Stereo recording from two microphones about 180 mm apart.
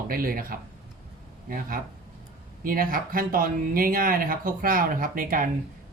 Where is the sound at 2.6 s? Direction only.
50° right (ahead or behind).